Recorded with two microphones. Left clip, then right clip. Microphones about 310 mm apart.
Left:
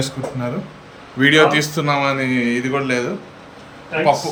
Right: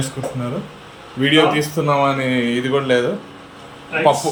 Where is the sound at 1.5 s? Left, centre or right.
Centre.